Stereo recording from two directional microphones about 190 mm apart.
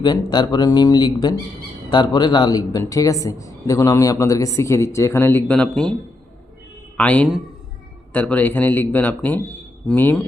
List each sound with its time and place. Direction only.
0.0 s a man's voice: 20° left (ahead or behind)